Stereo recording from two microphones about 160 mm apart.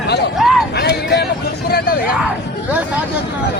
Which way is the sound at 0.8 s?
90° left.